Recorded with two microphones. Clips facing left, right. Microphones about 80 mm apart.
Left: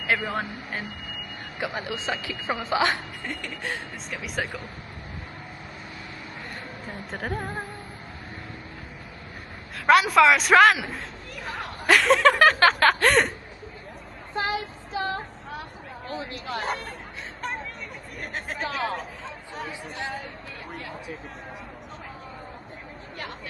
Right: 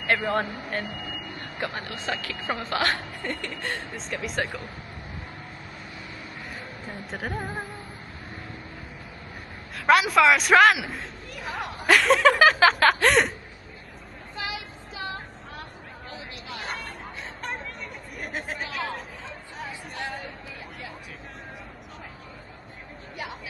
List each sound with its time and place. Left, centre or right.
0.0 s speech: centre
1.6 s speech: centre
3.2 s speech: centre
7.1 s speech: centre
9.8 s a man's voice: centre
14.3 s child singing: left
16.6 s chatter: centre